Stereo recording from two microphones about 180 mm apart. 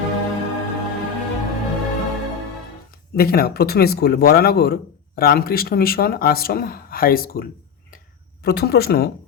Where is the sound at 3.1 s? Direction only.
60° left (ahead or behind).